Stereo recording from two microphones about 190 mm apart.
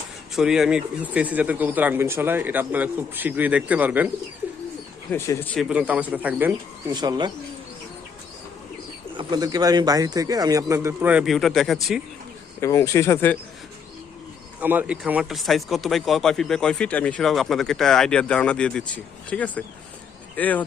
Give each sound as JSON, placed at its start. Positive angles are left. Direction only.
{"t": 0.3, "sound": "speech", "side_deg": 0}
{"t": 5.1, "sound": "speech", "side_deg": 15}
{"t": 5.6, "sound": "speech", "side_deg": -5}
{"t": 6.9, "sound": "speech", "side_deg": -20}
{"t": 9.1, "sound": "speech", "side_deg": -20}
{"t": 12.5, "sound": "speech", "side_deg": 15}
{"t": 14.6, "sound": "speech", "side_deg": -10}